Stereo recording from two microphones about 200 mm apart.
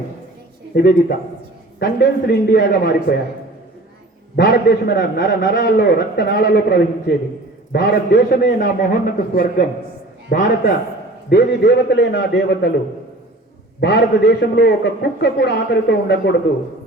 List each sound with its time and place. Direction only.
0.7 s a man's voice: 50° left (ahead or behind)
4.4 s a man's voice: 50° left (ahead or behind)
11.3 s a man's voice: 55° left (ahead or behind)
13.8 s a man's voice: 55° left (ahead or behind)